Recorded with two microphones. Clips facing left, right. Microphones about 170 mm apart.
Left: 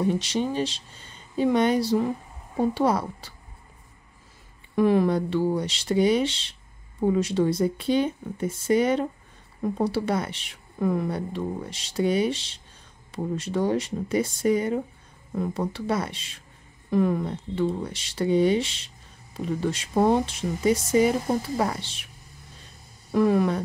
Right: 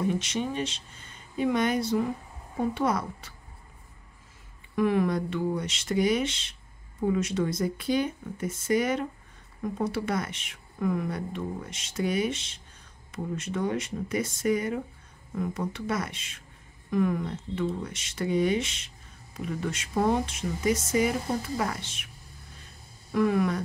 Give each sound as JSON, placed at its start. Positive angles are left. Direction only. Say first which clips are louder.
{"t": 0.0, "sound": "a woman's voice", "louder": "left 4 dB", "side_deg": 35}
{"t": 4.7, "sound": "a woman's voice", "louder": "left 4 dB", "side_deg": 30}
{"t": 23.1, "sound": "a woman's voice", "louder": "left 4 dB", "side_deg": 30}